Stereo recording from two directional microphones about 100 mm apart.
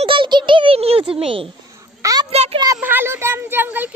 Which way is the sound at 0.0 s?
60° right (ahead or behind).